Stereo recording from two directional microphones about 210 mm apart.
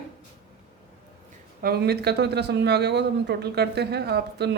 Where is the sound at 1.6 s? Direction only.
50° right (ahead or behind).